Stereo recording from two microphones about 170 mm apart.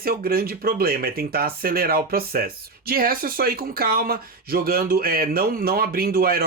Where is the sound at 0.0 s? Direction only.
60° right (ahead or behind).